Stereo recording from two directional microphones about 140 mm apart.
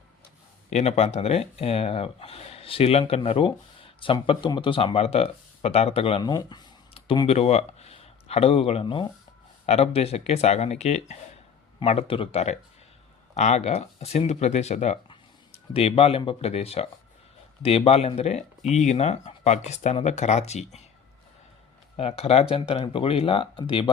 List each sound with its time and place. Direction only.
0.7 s speech: 50° left (ahead or behind)
6.3 s speech: 30° left (ahead or behind); by 20.8 s 50° left (ahead or behind)
21.9 s speech: 45° left (ahead or behind)